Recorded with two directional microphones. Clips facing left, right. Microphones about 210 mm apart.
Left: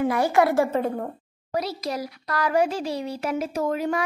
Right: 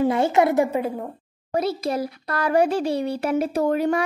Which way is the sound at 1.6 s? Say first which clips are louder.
Right 5 dB; 55° right (ahead or behind).